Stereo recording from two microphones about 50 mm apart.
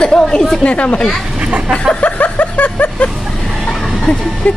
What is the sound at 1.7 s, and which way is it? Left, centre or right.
Vehicle, left.